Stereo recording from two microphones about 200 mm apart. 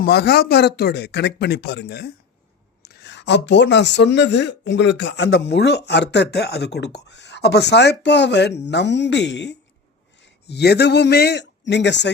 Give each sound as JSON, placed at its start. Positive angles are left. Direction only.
{"t": 0.0, "sound": "speech", "side_deg": 55}